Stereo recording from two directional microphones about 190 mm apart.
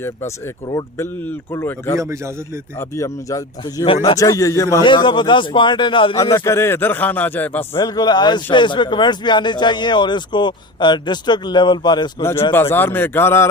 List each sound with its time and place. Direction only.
0.7 s a man's voice: 15° left (ahead or behind)
2.0 s a man's voice: 15° right (ahead or behind)
2.7 s a man's voice: 15° left (ahead or behind)
7.8 s a man's voice: 20° left (ahead or behind)